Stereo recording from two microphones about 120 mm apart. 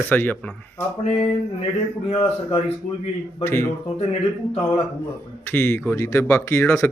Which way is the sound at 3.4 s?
20° left (ahead or behind).